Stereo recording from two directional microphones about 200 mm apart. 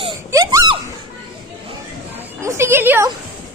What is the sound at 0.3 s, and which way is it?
Baby cry, 15° right (ahead or behind).